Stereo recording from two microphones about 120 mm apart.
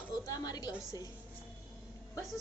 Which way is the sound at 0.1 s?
30° left (ahead or behind).